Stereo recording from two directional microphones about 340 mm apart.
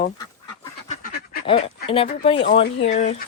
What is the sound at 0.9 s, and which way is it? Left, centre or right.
Duck, left.